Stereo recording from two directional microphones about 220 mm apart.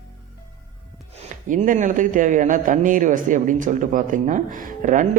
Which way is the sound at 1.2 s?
35° right (ahead or behind).